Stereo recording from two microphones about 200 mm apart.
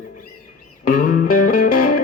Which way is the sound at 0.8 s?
45° left (ahead or behind).